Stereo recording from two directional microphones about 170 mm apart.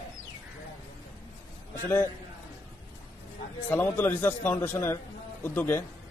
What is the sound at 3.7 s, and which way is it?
A man's voice, 10° left (ahead or behind).